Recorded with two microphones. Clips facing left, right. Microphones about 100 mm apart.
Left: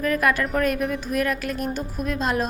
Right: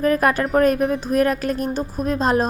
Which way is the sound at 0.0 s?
35° right (ahead or behind).